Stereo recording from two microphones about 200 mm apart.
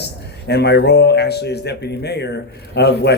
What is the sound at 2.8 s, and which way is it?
Speech, 55° left (ahead or behind).